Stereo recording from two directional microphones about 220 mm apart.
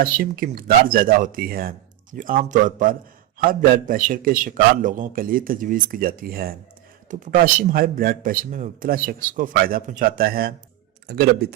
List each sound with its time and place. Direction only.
0.0 s a man's voice: 40° right (ahead or behind)